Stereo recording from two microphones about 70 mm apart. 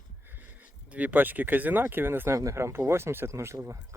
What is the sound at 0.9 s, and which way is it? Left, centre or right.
Speech, right.